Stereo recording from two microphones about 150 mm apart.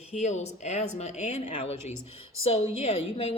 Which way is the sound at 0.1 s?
50° left (ahead or behind).